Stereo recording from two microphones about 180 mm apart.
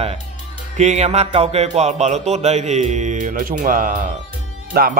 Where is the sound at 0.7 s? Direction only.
40° right (ahead or behind).